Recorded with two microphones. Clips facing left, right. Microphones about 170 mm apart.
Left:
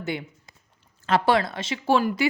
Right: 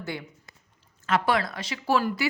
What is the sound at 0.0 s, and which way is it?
A woman's voice, 20° left (ahead or behind).